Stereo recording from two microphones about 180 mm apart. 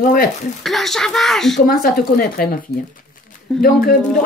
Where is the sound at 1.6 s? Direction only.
55° left (ahead or behind).